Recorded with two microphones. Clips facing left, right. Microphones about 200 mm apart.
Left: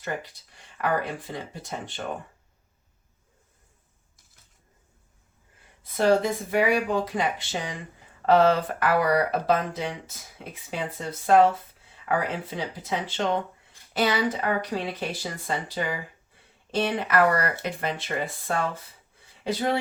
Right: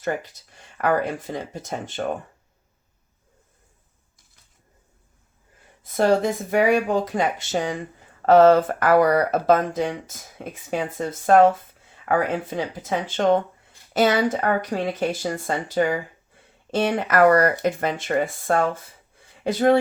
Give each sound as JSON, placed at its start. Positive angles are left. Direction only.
{"t": 0.0, "sound": "speech", "side_deg": -45}
{"t": 5.8, "sound": "speech", "side_deg": -45}